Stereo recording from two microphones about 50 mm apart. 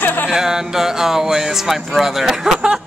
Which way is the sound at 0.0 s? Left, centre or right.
Left.